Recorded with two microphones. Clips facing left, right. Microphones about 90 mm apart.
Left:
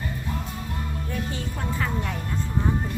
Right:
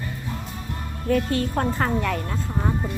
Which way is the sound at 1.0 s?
60° right (ahead or behind).